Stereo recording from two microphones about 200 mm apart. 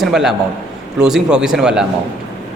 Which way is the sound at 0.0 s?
Centre (ahead or behind).